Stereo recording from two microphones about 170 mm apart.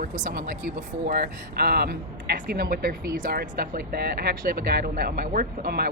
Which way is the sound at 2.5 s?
60° right (ahead or behind).